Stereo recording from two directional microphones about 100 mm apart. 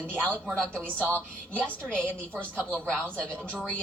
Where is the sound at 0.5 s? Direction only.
10° left (ahead or behind).